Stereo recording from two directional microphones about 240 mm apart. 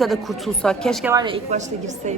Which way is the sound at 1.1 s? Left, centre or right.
Centre.